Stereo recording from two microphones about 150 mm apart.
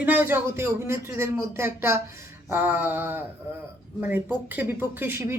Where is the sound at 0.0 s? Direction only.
10° right (ahead or behind).